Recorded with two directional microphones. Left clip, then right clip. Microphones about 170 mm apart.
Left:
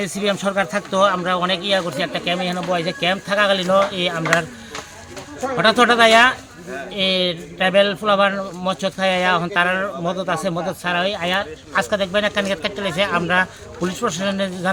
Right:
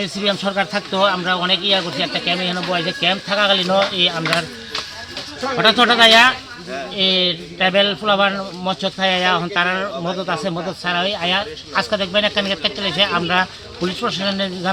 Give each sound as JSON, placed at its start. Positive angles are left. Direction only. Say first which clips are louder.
{"t": 0.0, "sound": "speech", "louder": "right 1 dB", "side_deg": 15}
{"t": 5.5, "sound": "speech", "louder": "right 1 dB", "side_deg": 25}
{"t": 6.9, "sound": "speech", "louder": "right 2 dB", "side_deg": 15}